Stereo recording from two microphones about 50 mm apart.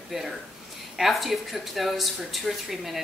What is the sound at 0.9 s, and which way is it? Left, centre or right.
Speech, centre.